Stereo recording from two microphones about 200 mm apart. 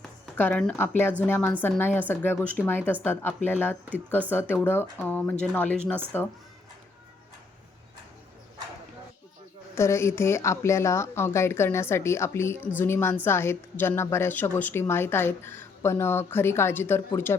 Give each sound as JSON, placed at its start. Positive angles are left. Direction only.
{"t": 0.3, "sound": "a woman's voice", "side_deg": 5}
{"t": 9.7, "sound": "a woman's voice", "side_deg": 15}